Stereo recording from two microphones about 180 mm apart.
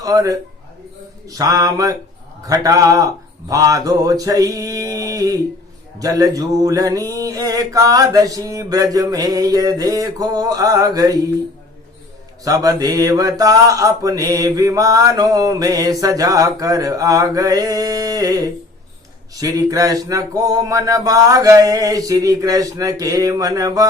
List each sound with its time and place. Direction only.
0.0 s mantra: 20° right (ahead or behind)
12.5 s mantra: 20° right (ahead or behind)